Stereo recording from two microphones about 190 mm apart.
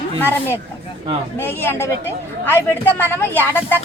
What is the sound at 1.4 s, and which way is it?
A woman's voice, 10° left (ahead or behind).